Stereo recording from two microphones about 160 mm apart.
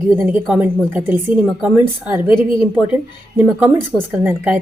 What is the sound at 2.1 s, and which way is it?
Speech, 30° left (ahead or behind).